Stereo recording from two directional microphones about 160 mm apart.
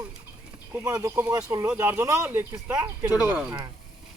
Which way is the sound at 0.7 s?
20° right (ahead or behind).